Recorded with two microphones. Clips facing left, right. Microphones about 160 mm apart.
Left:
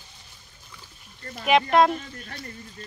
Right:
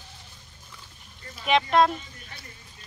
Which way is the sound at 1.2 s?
50° left (ahead or behind).